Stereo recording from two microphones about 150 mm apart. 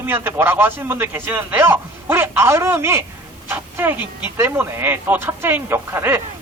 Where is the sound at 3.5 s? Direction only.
15° right (ahead or behind).